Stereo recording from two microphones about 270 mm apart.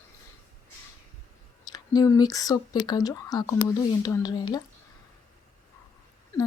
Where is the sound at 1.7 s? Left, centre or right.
Centre.